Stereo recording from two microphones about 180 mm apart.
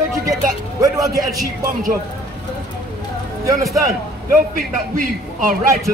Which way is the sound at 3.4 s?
20° right (ahead or behind).